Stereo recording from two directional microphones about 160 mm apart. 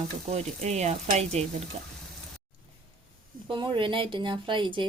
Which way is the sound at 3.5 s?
30° right (ahead or behind).